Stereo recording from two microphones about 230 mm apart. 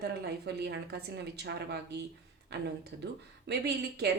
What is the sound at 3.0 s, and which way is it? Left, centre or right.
Speech, right.